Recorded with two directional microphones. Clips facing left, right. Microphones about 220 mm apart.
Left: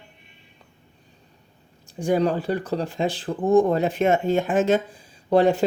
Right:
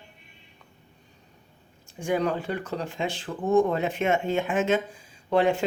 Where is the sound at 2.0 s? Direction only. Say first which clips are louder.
Left 5 dB; 35° left (ahead or behind).